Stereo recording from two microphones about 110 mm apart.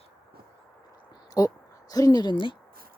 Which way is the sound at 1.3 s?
35° left (ahead or behind).